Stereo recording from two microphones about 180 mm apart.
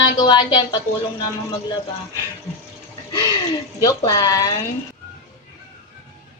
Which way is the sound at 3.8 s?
20° left (ahead or behind).